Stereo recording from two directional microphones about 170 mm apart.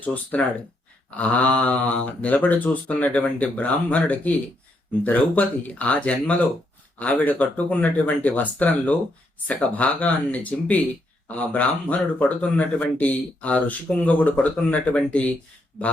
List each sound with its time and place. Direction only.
0.0 s speech: 10° left (ahead or behind)